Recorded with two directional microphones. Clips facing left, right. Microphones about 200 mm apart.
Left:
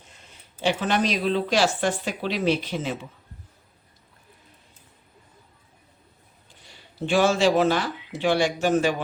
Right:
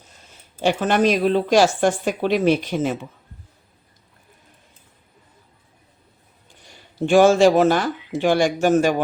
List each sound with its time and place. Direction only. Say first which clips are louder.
0.6 s speech: right 5 dB; 45° right (ahead or behind)
7.0 s speech: right 7 dB; 45° right (ahead or behind)